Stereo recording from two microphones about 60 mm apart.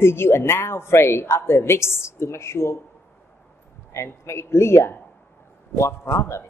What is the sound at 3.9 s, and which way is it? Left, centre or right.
A woman's voice, left.